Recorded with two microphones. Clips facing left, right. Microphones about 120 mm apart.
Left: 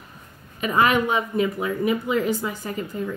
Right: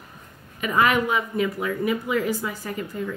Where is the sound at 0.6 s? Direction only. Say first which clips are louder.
Left 1 dB; 25° left (ahead or behind).